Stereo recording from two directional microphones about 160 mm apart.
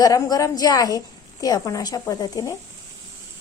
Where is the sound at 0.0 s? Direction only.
20° left (ahead or behind).